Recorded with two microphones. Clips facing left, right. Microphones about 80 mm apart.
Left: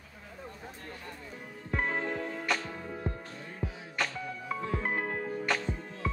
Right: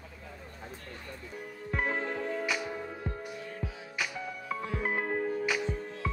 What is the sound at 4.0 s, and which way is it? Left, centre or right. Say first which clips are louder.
Music: left 2 dB; centre.